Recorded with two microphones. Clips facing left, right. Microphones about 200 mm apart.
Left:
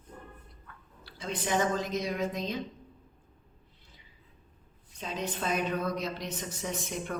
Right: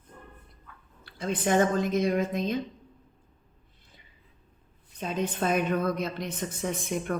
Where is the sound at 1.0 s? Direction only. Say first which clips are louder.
Right 6 dB; 55° right (ahead or behind).